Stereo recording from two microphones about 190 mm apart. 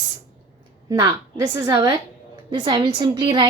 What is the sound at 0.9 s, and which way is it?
A woman's voice, 20° right (ahead or behind).